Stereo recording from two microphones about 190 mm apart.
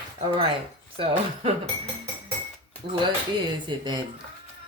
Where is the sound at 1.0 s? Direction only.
25° right (ahead or behind).